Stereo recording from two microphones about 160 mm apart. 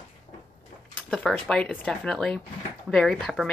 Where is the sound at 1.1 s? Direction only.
5° left (ahead or behind).